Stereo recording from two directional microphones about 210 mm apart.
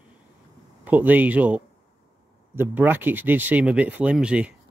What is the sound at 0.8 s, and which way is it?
Speech, 10° right (ahead or behind).